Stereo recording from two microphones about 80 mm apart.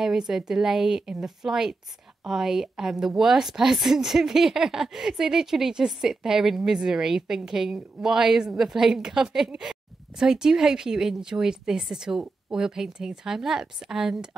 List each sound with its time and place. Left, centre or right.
0.0 s a woman's voice: centre